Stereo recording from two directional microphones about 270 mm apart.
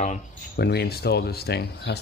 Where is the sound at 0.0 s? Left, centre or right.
Left.